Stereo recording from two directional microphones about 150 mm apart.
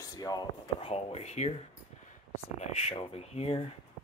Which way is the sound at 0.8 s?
45° left (ahead or behind).